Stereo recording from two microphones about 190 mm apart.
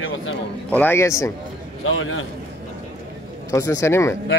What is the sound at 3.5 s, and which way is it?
Speech, 15° left (ahead or behind).